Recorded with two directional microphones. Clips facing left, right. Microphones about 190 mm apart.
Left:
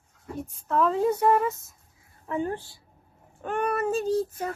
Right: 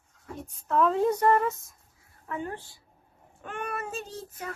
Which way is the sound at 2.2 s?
30° left (ahead or behind).